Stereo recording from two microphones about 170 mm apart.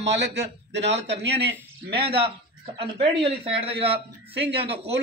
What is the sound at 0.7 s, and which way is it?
Speech, 90° right.